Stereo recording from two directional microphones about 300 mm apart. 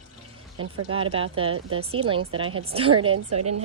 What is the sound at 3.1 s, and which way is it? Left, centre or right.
Speech, right.